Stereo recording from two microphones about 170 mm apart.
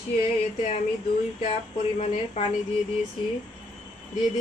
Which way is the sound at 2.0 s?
40° left (ahead or behind).